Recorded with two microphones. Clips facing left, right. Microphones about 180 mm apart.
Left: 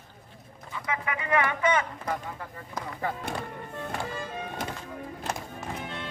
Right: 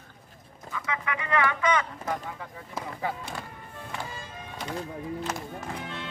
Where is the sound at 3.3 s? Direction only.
60° left (ahead or behind).